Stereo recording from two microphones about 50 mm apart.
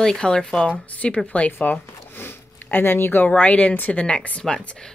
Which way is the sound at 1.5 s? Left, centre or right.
Left.